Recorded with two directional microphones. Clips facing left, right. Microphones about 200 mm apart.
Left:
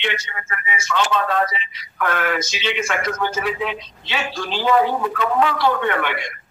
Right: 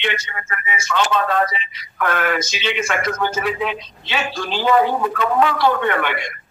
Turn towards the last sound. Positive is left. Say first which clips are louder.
# right 1 dB
turn(degrees=-50)  # may be behind; listen again after turning